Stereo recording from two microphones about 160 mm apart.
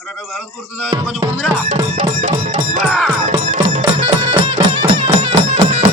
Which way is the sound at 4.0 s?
35° right (ahead or behind).